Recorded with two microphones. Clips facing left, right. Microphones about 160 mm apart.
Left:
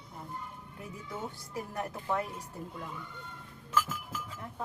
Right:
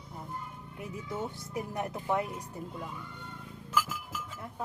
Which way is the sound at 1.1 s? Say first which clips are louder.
Right 3 dB; 20° right (ahead or behind).